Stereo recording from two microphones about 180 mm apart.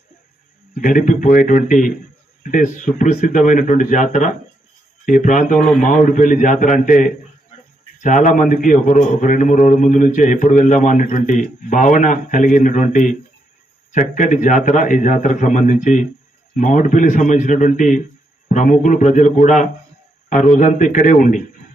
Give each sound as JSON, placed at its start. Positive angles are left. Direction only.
{"t": 0.8, "sound": "a man's voice", "side_deg": 45}
{"t": 5.5, "sound": "a man's voice", "side_deg": 5}
{"t": 5.8, "sound": "a man's voice", "side_deg": 45}